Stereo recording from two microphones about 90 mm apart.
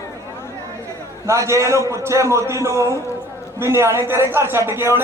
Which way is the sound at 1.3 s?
35° right (ahead or behind).